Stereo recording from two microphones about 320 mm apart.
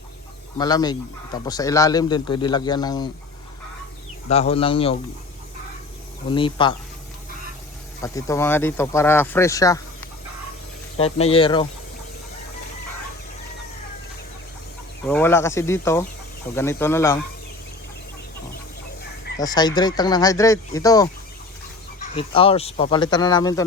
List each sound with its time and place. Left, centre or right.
0.6 s speech: centre
4.3 s speech: centre
6.3 s speech: centre
8.0 s speech: centre
10.9 s speech: centre
15.0 s speech: centre
19.4 s speech: centre